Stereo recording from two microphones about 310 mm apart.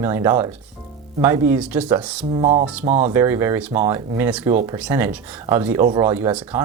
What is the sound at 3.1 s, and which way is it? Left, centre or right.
Speech, centre.